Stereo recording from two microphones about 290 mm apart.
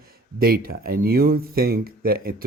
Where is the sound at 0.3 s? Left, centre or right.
Right.